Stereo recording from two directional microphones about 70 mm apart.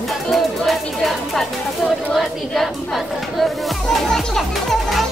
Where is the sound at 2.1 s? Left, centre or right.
Centre.